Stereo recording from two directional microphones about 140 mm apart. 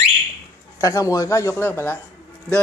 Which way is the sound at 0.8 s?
25° left (ahead or behind).